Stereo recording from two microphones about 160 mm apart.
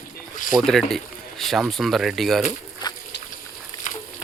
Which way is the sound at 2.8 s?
25° left (ahead or behind).